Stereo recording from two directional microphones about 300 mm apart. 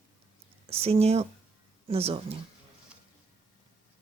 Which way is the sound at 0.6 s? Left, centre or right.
Centre.